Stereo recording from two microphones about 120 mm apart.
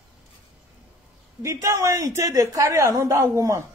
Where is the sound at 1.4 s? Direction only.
25° right (ahead or behind).